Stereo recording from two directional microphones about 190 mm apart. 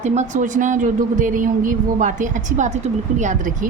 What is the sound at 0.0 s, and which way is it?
A woman's voice, 35° right (ahead or behind).